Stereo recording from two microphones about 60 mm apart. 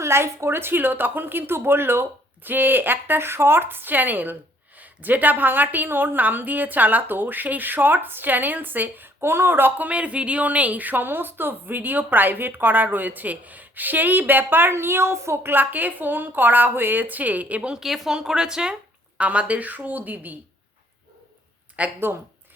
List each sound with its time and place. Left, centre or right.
0.0 s speech: right
15.5 s speech: right
17.8 s speech: centre; by 20.4 s right
21.8 s speech: right